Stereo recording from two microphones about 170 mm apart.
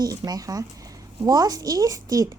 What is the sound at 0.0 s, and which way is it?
A woman's voice, 20° right (ahead or behind).